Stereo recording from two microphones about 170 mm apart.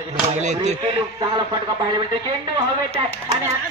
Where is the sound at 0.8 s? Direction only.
25° right (ahead or behind).